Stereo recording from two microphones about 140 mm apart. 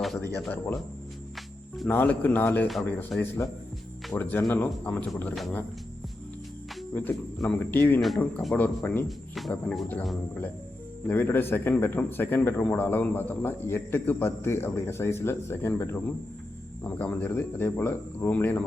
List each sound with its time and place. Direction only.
0.4 s speech: 15° left (ahead or behind)
1.9 s speech: 15° left (ahead or behind)
6.9 s speech: 15° left (ahead or behind)
9.0 s speech: centre (ahead or behind)
11.1 s speech: 15° left (ahead or behind)